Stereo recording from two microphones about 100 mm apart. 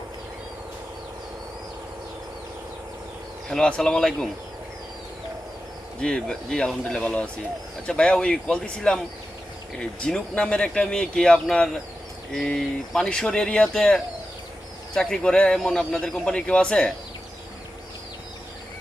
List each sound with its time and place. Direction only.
3.5 s speech: 5° left (ahead or behind)
6.0 s speech: 10° left (ahead or behind)